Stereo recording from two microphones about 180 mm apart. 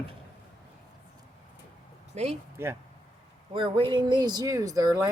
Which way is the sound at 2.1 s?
40° right (ahead or behind).